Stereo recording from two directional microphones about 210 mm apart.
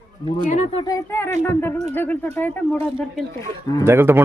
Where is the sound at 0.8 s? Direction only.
15° left (ahead or behind).